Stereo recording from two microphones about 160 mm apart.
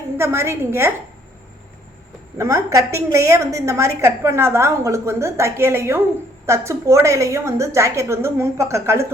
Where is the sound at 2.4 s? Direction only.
20° right (ahead or behind).